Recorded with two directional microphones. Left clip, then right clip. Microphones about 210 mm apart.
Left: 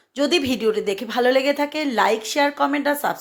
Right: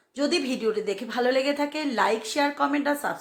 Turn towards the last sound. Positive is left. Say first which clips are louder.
# left 5 dB
turn(degrees=25)  # may be behind; listen again after turning